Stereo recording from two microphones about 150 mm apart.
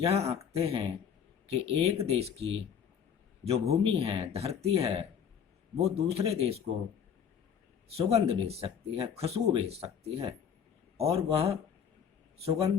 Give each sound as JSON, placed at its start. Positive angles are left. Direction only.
{"t": 0.0, "sound": "speech", "side_deg": -45}
{"t": 7.9, "sound": "speech", "side_deg": -40}